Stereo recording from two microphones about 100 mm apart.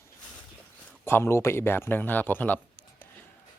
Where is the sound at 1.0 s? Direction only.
25° left (ahead or behind).